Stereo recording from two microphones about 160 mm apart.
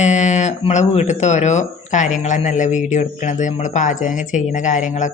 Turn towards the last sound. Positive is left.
turn(degrees=50)  # may be behind; listen again after turning